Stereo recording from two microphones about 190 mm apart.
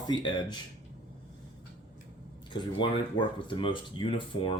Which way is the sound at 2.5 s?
25° left (ahead or behind).